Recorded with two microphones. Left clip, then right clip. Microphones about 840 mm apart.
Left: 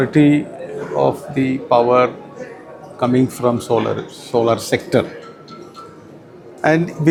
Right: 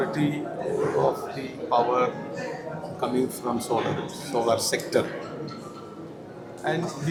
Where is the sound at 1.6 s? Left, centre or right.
Left.